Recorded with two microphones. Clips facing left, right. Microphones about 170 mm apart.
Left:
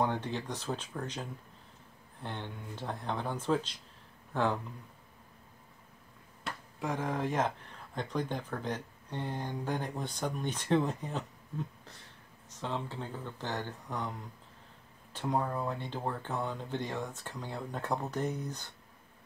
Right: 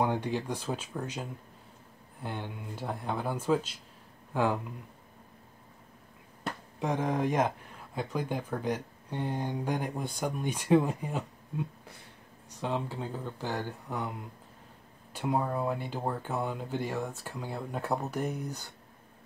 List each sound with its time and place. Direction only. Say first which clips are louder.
0.0 s speech: right 3 dB; 10° right (ahead or behind)
2.2 s speech: right 3 dB; 10° right (ahead or behind)
6.8 s speech: right 4 dB; 20° right (ahead or behind)
15.1 s speech: right 2 dB; 10° right (ahead or behind)